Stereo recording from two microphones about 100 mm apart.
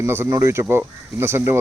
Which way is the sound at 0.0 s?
25° right (ahead or behind).